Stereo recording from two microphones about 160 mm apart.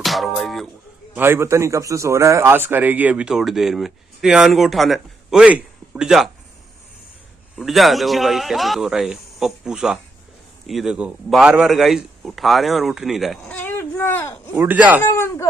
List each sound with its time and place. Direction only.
0.0 s music: centre (ahead or behind)
1.1 s a man's voice: 15° right (ahead or behind)
7.5 s a man's voice: centre (ahead or behind)
13.5 s speech: 10° left (ahead or behind)
14.5 s a man's voice: 10° right (ahead or behind)
15.0 s speech: 15° left (ahead or behind)